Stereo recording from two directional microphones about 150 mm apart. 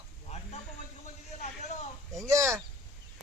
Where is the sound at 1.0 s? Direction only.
50° left (ahead or behind).